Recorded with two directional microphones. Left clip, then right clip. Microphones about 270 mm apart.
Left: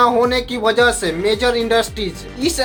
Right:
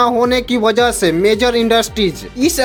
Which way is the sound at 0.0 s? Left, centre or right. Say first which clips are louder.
Right 1 dB; right.